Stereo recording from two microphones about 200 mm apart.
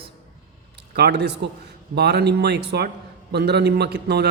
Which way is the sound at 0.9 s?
55° right (ahead or behind).